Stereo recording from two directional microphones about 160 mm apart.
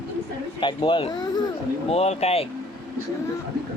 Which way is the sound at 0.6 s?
30° left (ahead or behind).